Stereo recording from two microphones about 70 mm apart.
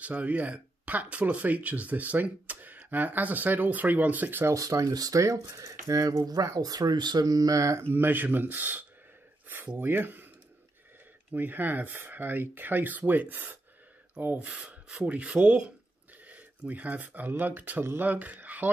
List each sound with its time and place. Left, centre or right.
0.0 s speech: centre
4.6 s speech: right
6.6 s speech: right
7.9 s speech: right
11.3 s speech: right